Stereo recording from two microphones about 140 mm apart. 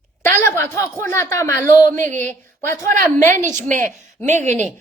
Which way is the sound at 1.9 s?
60° right (ahead or behind).